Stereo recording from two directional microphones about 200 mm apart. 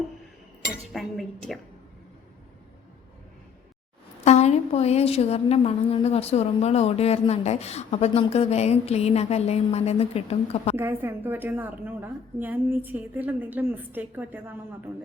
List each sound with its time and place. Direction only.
0.9 s chink: centre (ahead or behind)
4.2 s a woman's voice: 35° left (ahead or behind)
10.8 s a woman's voice: 10° right (ahead or behind)